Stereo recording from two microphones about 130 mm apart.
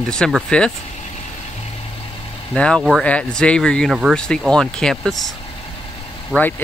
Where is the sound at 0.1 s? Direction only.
5° left (ahead or behind).